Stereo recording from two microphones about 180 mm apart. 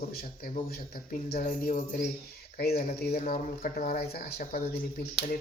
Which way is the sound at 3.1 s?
45° left (ahead or behind).